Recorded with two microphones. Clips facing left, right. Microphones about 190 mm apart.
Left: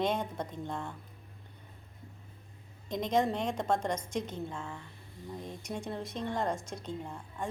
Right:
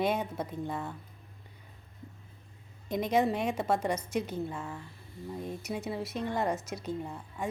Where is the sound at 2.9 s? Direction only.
10° right (ahead or behind).